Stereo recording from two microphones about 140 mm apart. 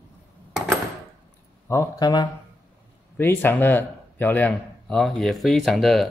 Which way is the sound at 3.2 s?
15° left (ahead or behind).